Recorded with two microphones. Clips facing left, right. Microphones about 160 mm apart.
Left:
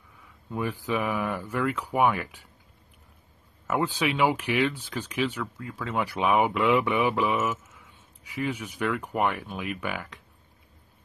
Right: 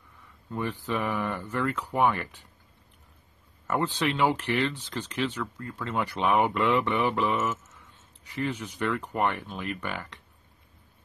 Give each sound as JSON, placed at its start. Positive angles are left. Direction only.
{"t": 0.5, "sound": "speech", "side_deg": 10}
{"t": 3.6, "sound": "speech", "side_deg": 10}